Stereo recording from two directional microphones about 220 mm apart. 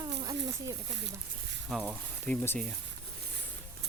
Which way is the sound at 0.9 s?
50° right (ahead or behind).